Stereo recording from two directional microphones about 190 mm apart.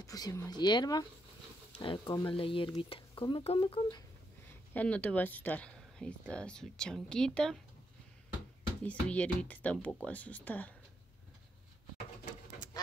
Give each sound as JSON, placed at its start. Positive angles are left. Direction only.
{"t": 0.0, "sound": "speech", "side_deg": 20}
{"t": 4.7, "sound": "speech", "side_deg": 5}
{"t": 8.8, "sound": "speech", "side_deg": 5}